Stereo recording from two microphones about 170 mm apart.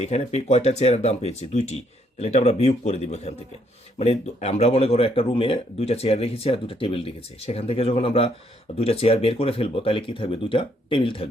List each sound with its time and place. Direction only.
0.0 s speech: 40° left (ahead or behind)